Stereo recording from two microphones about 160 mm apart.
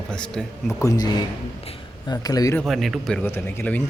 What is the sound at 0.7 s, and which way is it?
A man's voice, 20° left (ahead or behind).